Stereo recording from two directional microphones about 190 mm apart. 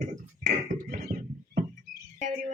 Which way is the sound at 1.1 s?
50° right (ahead or behind).